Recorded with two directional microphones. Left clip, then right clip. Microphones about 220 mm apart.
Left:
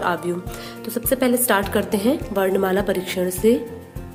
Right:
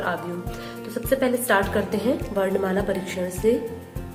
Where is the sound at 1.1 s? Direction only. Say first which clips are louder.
Left 2 dB; 45° left (ahead or behind).